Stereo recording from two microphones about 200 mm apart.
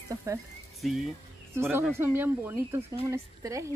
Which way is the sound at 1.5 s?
10° right (ahead or behind).